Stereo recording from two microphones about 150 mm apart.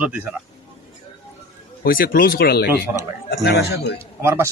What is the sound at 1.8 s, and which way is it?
Speech, 75° left (ahead or behind).